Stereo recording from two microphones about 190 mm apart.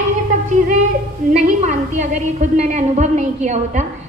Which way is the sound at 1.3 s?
35° right (ahead or behind).